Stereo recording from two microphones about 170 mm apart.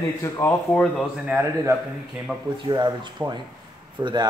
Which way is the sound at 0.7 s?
5° left (ahead or behind).